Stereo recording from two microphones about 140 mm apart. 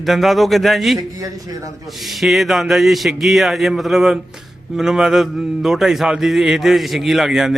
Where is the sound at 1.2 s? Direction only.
25° right (ahead or behind).